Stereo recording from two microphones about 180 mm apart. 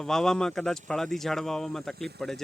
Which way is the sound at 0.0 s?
5° left (ahead or behind).